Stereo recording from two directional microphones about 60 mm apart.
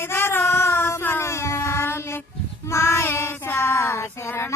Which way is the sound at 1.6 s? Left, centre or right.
Left.